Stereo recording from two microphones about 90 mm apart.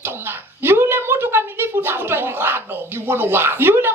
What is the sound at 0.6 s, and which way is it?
Speech, 25° right (ahead or behind).